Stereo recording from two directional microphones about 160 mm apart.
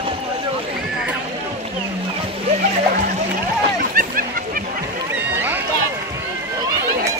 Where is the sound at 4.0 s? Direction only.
65° right (ahead or behind).